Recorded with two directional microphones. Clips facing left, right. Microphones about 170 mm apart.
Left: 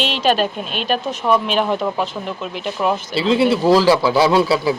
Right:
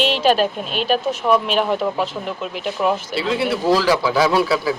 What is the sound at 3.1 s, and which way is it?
A man's voice, 25° left (ahead or behind).